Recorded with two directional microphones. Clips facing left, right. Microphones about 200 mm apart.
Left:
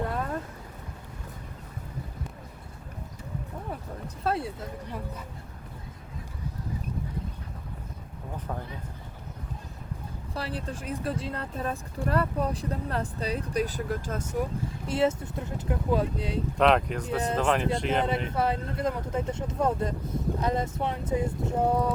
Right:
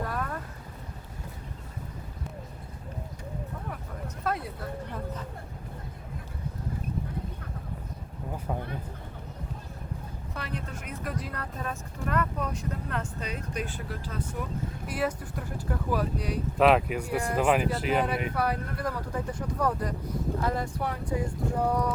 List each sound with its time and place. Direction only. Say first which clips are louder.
0.0 s boat: left 2 dB; 25° left (ahead or behind)
4.2 s speech: left 3 dB; 30° left (ahead or behind)
10.3 s speech: left 3 dB; 30° left (ahead or behind)
14.8 s speech: left 6 dB; 25° left (ahead or behind)
16.6 s speech: right 1 dB; 5° right (ahead or behind)
18.3 s speech: left 2 dB; 25° left (ahead or behind)